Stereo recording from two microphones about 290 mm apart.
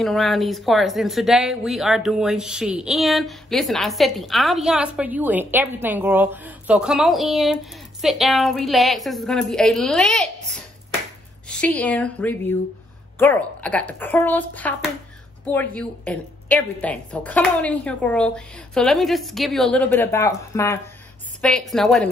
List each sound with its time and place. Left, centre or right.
0.0 s speech: centre